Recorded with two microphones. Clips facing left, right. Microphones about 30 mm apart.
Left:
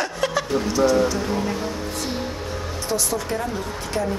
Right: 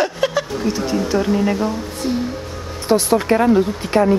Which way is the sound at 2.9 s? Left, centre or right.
Right.